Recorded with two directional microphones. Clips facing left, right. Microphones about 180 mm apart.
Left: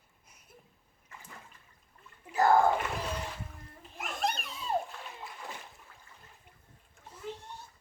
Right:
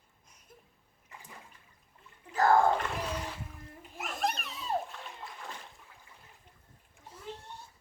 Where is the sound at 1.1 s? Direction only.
15° right (ahead or behind).